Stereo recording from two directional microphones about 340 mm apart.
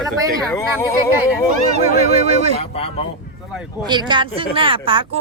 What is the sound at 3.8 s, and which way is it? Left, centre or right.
Speech, centre.